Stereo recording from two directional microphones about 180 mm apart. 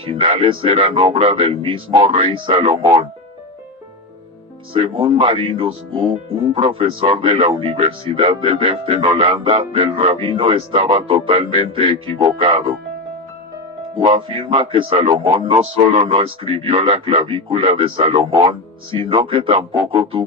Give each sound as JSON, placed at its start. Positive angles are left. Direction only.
{"t": 0.0, "sound": "speech", "side_deg": -30}
{"t": 4.7, "sound": "speech", "side_deg": -30}
{"t": 13.9, "sound": "speech", "side_deg": -30}